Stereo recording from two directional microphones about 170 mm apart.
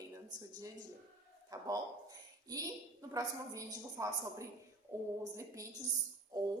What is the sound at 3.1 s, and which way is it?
A woman's voice, 20° right (ahead or behind).